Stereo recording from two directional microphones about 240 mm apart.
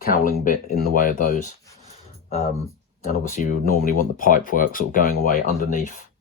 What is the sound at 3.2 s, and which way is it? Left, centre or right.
Speech, left.